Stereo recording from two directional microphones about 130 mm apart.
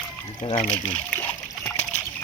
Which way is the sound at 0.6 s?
75° left (ahead or behind).